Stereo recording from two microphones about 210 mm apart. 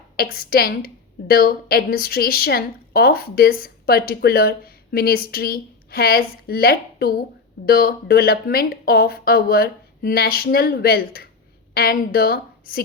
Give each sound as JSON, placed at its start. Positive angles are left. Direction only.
{"t": 0.2, "sound": "a woman's voice", "side_deg": 45}